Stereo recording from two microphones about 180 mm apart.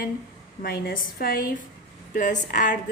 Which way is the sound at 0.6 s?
55° left (ahead or behind).